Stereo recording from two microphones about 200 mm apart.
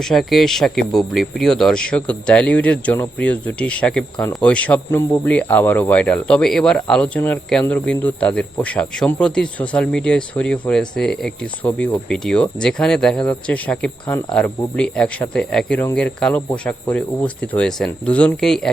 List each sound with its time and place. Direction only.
0.0 s speech: centre (ahead or behind)